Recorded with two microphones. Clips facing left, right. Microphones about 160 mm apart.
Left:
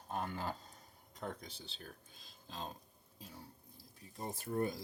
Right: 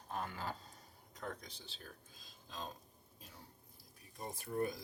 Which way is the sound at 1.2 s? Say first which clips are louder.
Left 2 dB; 30° left (ahead or behind).